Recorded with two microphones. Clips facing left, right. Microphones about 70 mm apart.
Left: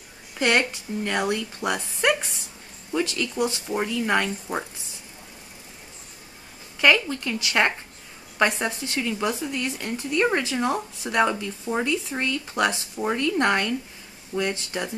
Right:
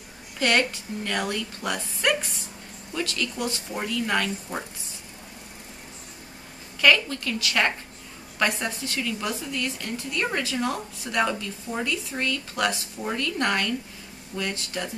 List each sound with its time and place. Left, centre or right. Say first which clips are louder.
0.4 s a woman's voice: left 1 dB; centre
6.8 s a woman's voice: left 1 dB; left